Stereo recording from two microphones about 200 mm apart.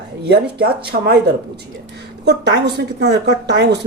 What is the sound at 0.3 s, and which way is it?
Speech, 55° right (ahead or behind).